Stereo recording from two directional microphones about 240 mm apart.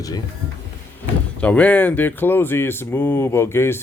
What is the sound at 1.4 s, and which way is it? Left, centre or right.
Speech, centre.